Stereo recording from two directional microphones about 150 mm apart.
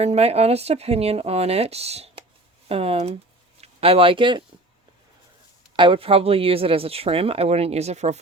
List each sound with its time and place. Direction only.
0.0 s speech: 45° right (ahead or behind)
5.7 s speech: 35° right (ahead or behind)